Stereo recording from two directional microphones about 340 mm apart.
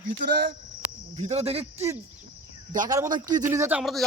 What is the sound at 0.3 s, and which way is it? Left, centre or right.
Speech, right.